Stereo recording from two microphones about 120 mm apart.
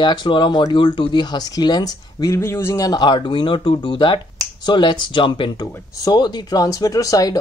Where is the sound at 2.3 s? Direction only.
20° left (ahead or behind).